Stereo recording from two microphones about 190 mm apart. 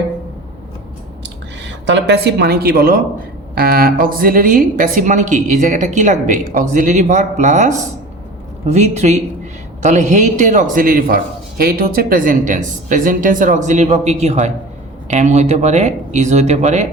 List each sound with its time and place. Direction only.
1.2 s a woman's voice: 70° right (ahead or behind); by 16.8 s 35° right (ahead or behind)